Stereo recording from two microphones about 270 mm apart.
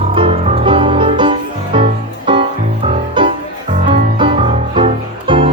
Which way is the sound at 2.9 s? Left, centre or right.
Centre.